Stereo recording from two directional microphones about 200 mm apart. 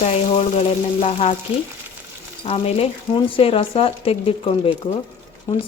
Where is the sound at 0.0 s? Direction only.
30° left (ahead or behind).